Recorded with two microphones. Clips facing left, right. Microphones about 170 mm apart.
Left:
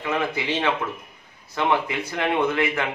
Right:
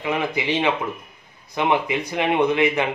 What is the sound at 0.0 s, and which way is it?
Speech, 15° right (ahead or behind).